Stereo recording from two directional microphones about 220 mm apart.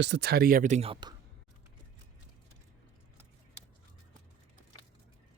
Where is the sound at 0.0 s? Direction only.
50° right (ahead or behind); by 1.1 s 25° right (ahead or behind).